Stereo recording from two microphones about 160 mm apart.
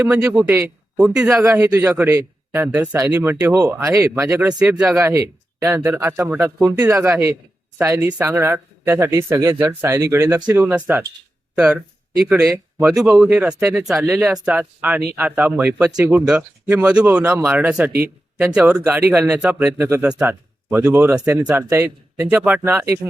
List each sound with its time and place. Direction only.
0.0 s speech: 20° right (ahead or behind)
1.5 s speech: 20° right (ahead or behind)
1.9 s speech: 10° right (ahead or behind)
4.9 s speech: 15° right (ahead or behind)
12.9 s speech: 5° right (ahead or behind)